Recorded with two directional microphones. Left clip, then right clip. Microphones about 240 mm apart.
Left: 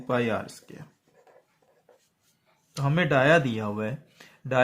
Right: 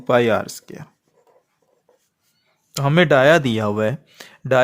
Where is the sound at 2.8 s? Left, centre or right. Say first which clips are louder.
Right 9 dB; right.